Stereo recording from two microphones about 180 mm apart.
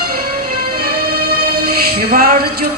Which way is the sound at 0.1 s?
55° right (ahead or behind).